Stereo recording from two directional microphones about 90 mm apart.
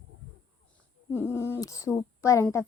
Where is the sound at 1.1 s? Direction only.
25° left (ahead or behind).